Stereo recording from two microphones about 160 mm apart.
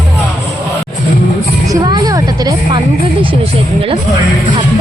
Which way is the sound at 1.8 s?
25° right (ahead or behind).